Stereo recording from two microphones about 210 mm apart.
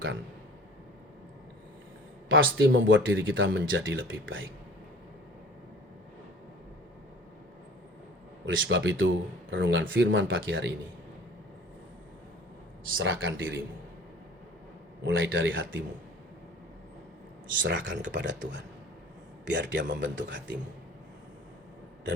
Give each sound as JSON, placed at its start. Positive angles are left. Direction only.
{"t": 2.3, "sound": "speech", "side_deg": -65}
{"t": 8.4, "sound": "speech", "side_deg": -65}
{"t": 13.0, "sound": "speech", "side_deg": -65}
{"t": 15.0, "sound": "speech", "side_deg": -65}
{"t": 17.6, "sound": "speech", "side_deg": -60}
{"t": 19.5, "sound": "speech", "side_deg": -60}